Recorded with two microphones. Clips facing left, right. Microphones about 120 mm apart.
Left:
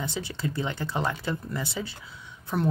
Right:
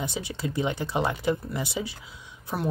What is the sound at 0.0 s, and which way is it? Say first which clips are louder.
Speech: even; 15° right (ahead or behind).